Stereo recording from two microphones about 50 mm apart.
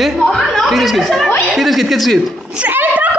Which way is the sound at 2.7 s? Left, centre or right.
Right.